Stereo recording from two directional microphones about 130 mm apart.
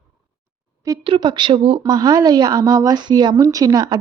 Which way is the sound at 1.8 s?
30° right (ahead or behind).